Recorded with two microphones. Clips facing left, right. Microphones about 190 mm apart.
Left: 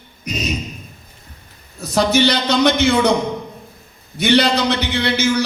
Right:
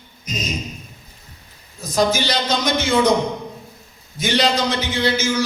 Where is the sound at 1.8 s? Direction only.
65° left (ahead or behind).